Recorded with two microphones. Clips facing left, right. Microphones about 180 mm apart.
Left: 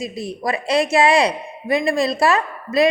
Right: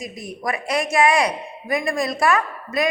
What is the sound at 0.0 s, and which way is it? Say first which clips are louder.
A woman's voice: left 4 dB; 30° left (ahead or behind).